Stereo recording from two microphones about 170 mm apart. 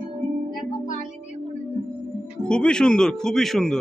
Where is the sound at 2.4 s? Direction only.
5° left (ahead or behind).